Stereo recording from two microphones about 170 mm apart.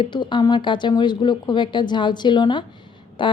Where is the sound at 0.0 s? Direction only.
30° left (ahead or behind).